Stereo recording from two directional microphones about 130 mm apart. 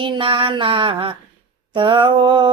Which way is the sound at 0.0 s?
40° right (ahead or behind).